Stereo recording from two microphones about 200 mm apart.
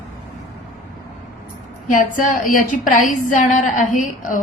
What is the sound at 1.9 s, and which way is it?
A woman's voice, 40° left (ahead or behind).